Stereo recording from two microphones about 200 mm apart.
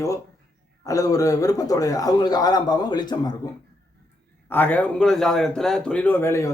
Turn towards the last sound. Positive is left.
turn(degrees=15)  # may be behind; listen again after turning